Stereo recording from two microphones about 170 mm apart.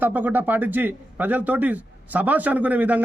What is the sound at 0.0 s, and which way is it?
A man's voice, 10° right (ahead or behind).